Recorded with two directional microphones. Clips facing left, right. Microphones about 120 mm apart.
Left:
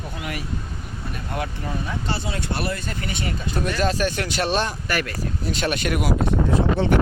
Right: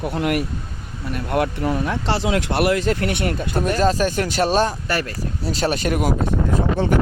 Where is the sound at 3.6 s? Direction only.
40° right (ahead or behind).